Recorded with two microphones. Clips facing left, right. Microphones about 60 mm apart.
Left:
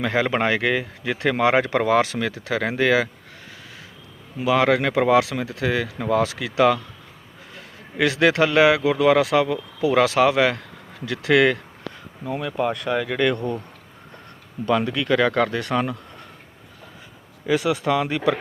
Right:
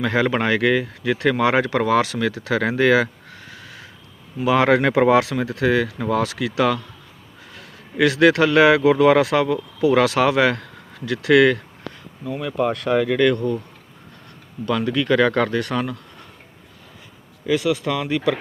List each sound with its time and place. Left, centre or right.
0.0 s speech: centre
2.6 s speech: centre
4.4 s speech: centre
5.2 s speech: centre
8.8 s speech: centre
12.2 s speech: left
13.1 s speech: centre
14.7 s speech: centre
17.4 s speech: left